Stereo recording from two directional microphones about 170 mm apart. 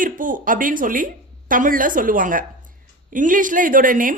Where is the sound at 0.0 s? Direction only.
50° right (ahead or behind).